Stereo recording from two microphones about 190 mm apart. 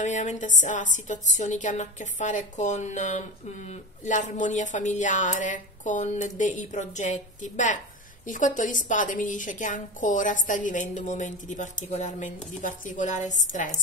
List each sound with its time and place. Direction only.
0.0 s a woman's voice: 40° left (ahead or behind)